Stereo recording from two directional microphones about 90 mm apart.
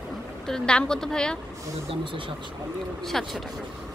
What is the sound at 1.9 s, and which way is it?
Speech, 70° right (ahead or behind).